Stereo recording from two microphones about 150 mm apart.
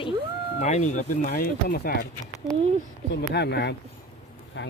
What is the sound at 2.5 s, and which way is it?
Speech, 5° left (ahead or behind).